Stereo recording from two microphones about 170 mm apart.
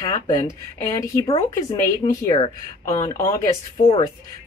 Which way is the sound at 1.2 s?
35° left (ahead or behind).